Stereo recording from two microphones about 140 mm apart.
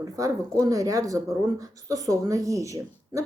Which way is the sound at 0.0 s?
25° right (ahead or behind).